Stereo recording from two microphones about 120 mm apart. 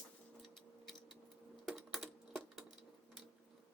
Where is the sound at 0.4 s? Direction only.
Centre (ahead or behind).